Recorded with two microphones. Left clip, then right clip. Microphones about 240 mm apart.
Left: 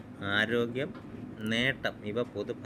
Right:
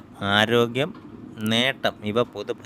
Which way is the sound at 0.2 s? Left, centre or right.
Right.